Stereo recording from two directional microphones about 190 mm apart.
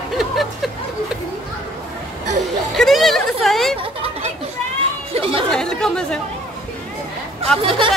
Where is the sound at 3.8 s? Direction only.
30° right (ahead or behind).